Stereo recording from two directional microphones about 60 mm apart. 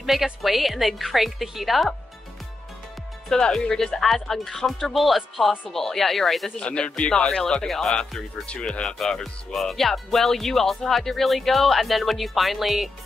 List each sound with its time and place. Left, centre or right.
0.0 s speech: centre
3.3 s speech: centre
6.5 s speech: centre